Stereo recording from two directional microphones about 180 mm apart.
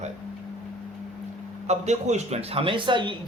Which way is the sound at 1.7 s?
40° right (ahead or behind).